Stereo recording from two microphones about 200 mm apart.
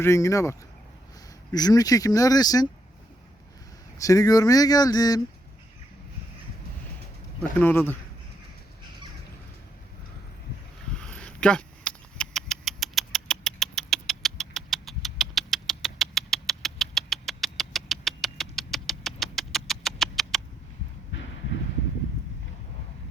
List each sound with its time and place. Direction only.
0.0 s speech: 15° left (ahead or behind)
1.5 s speech: 20° left (ahead or behind)
3.9 s speech: 15° left (ahead or behind)
7.6 s speech: 10° left (ahead or behind)
10.9 s a sound: 5° left (ahead or behind)
21.1 s a sound: 70° left (ahead or behind)